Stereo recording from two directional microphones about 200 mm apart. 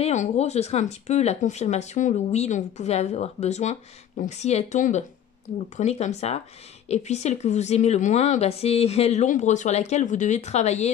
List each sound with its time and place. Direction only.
0.0 s speech: 35° left (ahead or behind)